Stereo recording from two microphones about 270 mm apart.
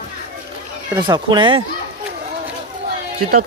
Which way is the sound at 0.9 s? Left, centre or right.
Centre.